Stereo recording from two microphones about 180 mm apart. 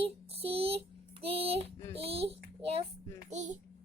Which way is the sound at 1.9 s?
35° right (ahead or behind).